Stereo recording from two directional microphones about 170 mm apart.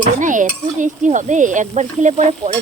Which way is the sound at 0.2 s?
50° right (ahead or behind).